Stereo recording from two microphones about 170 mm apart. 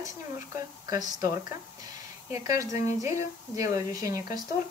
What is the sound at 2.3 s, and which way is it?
Speech, 20° right (ahead or behind).